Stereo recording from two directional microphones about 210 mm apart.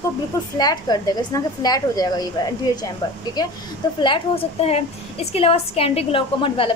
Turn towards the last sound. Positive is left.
turn(degrees=25)  # may be behind; listen again after turning